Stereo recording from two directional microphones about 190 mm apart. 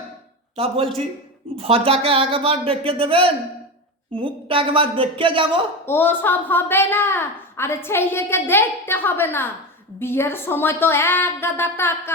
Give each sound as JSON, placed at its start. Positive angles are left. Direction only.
{"t": 0.5, "sound": "a man's voice", "side_deg": -30}
{"t": 5.8, "sound": "a woman's voice", "side_deg": 10}